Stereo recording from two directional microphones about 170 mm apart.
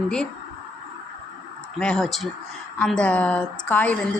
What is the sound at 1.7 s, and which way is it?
Speech, 5° left (ahead or behind).